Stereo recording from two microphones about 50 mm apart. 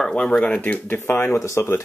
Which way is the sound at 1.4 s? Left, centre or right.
Left.